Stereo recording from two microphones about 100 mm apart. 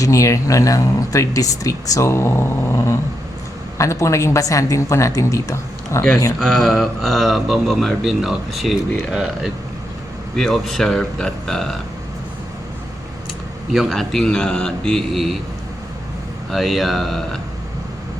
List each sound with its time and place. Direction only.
0.0 s speech: 35° left (ahead or behind)
6.4 s speech: centre (ahead or behind)
13.7 s speech: centre (ahead or behind)
16.5 s speech: centre (ahead or behind)